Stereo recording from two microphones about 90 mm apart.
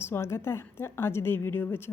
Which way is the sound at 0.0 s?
30° left (ahead or behind).